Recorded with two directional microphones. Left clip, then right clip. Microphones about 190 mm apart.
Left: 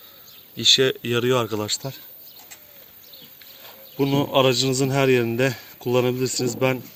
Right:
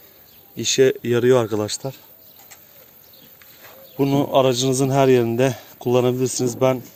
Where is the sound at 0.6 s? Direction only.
45° right (ahead or behind).